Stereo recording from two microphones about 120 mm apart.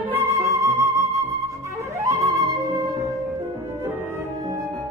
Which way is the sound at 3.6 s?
20° right (ahead or behind).